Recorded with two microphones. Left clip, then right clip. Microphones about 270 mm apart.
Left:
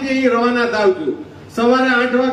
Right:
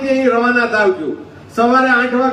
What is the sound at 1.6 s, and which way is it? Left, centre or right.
Speech, centre.